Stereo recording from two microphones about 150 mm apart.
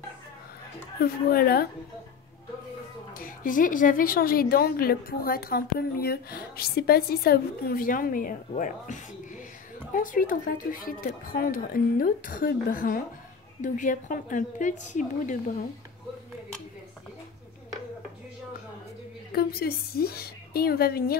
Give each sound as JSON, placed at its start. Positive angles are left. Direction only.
{"t": 1.0, "sound": "a woman's voice", "side_deg": 80}
{"t": 3.2, "sound": "a woman's voice", "side_deg": 65}
{"t": 9.9, "sound": "speech", "side_deg": 65}
{"t": 13.6, "sound": "a woman's voice", "side_deg": 60}
{"t": 19.3, "sound": "a woman's voice", "side_deg": 90}